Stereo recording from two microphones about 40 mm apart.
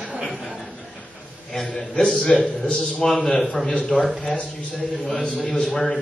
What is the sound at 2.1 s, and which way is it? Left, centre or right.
A man's voice, centre.